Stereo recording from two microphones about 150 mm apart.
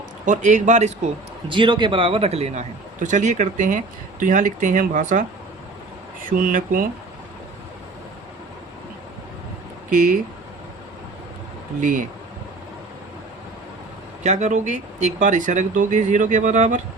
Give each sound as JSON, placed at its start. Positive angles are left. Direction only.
{"t": 0.3, "sound": "a man's voice", "side_deg": -55}
{"t": 1.5, "sound": "a man's voice", "side_deg": -35}
{"t": 6.3, "sound": "speech", "side_deg": -65}
{"t": 11.8, "sound": "speech", "side_deg": -60}
{"t": 14.3, "sound": "speech", "side_deg": -50}